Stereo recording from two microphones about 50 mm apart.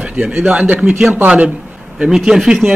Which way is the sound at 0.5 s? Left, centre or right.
Right.